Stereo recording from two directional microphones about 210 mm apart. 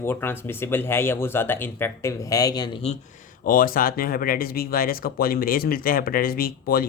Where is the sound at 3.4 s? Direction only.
45° left (ahead or behind).